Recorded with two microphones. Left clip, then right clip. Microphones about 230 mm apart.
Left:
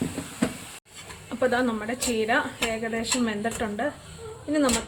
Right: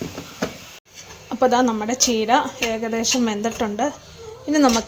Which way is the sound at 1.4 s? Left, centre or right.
Right.